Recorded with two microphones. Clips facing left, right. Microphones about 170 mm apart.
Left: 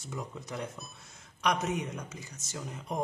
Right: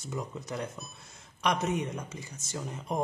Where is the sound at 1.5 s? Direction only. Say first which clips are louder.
Right 1 dB; 30° right (ahead or behind).